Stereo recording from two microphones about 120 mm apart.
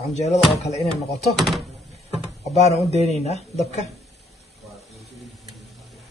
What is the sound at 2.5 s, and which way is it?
Speech, 65° left (ahead or behind).